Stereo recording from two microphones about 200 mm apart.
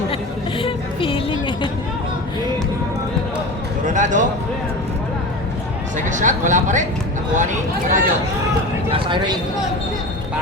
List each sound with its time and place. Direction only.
0.6 s music: 25° left (ahead or behind)
3.8 s a sound: 40° right (ahead or behind)
6.1 s speech: 40° right (ahead or behind)
8.9 s a man's voice: 25° right (ahead or behind)